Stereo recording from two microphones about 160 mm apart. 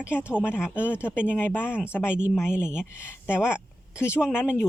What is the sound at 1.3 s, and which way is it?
Speech, 15° left (ahead or behind).